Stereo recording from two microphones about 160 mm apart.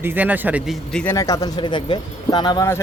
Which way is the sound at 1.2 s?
20° left (ahead or behind).